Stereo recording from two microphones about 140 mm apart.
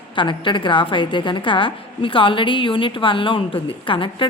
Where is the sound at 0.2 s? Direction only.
35° left (ahead or behind).